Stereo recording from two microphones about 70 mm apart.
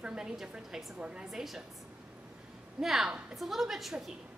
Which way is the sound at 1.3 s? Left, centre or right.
Centre.